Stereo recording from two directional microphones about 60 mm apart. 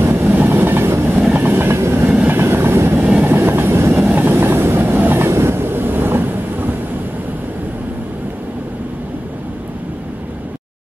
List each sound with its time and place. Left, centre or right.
0.0 s train: right
1.3 s train: right
1.6 s train: right
3.1 s train: right
3.3 s train: right
4.0 s train: right